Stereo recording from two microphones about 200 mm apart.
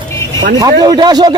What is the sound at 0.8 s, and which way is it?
Speech, 20° right (ahead or behind).